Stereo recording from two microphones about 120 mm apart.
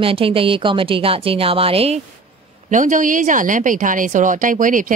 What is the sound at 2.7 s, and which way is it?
A woman's voice, 90° right.